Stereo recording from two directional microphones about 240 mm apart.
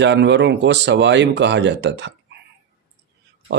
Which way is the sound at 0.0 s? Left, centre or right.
Right.